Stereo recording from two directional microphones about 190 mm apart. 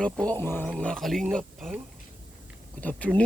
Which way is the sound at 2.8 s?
5° left (ahead or behind).